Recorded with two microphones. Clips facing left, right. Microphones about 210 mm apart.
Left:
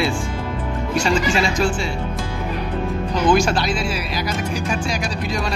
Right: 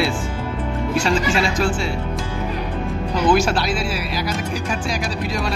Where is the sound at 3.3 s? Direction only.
5° right (ahead or behind).